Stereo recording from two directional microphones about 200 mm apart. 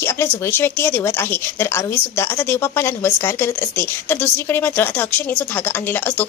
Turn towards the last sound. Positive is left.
turn(degrees=10)  # may be behind; listen again after turning